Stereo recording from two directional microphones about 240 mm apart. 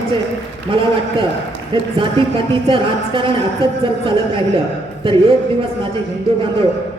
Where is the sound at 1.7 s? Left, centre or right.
Right.